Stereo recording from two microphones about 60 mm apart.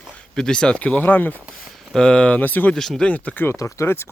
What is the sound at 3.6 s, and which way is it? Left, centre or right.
Speech, left.